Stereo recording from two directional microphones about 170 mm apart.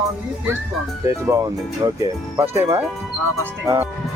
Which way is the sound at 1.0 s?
20° right (ahead or behind).